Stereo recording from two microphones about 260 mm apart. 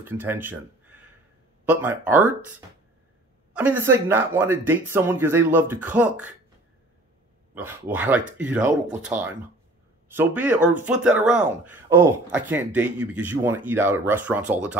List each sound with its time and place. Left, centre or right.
0.0 s speech: centre
3.5 s speech: centre
7.5 s speech: centre
10.1 s speech: centre